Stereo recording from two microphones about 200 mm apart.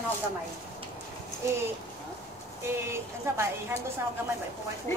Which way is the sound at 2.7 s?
10° right (ahead or behind).